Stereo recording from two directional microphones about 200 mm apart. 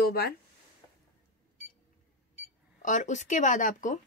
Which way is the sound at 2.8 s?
40° left (ahead or behind).